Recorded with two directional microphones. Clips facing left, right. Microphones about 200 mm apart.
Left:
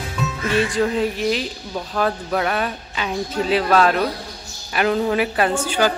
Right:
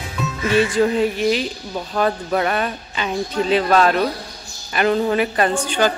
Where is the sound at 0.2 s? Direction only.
Centre (ahead or behind).